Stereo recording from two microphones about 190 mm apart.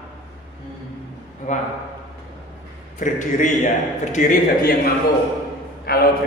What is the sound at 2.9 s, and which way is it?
A man's voice, 40° left (ahead or behind).